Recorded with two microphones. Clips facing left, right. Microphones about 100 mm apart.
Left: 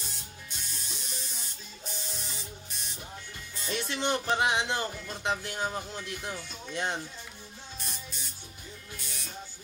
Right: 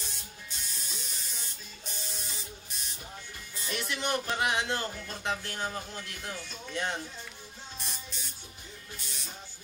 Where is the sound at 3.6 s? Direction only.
25° left (ahead or behind).